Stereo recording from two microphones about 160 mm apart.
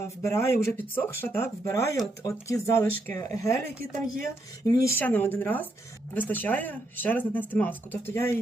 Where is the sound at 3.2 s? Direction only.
20° left (ahead or behind).